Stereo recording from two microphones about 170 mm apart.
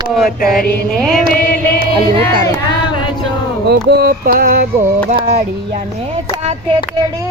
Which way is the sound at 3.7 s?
80° right.